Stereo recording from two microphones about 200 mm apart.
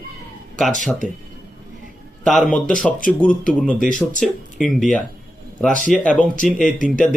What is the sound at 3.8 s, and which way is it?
Speech, 40° left (ahead or behind).